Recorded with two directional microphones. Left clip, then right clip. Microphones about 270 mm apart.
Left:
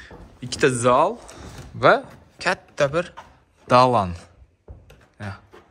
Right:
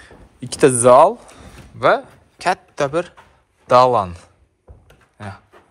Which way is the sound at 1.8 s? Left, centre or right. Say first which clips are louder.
Right 1 dB; centre.